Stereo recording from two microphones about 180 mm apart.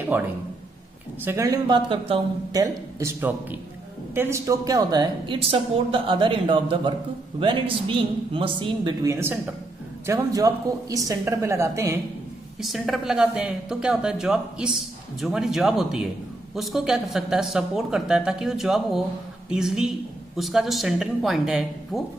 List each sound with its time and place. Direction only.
0.1 s a woman's voice: 10° right (ahead or behind); by 8.9 s 30° right (ahead or behind)
9.0 s a woman's voice: 15° right (ahead or behind)
12.5 s speech: centre (ahead or behind)